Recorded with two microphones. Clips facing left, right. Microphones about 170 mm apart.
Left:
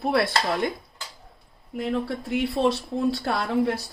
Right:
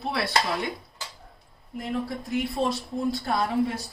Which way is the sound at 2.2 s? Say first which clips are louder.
Left 4 dB; 75° left (ahead or behind).